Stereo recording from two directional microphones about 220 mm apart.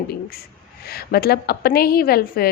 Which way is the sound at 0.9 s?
45° left (ahead or behind).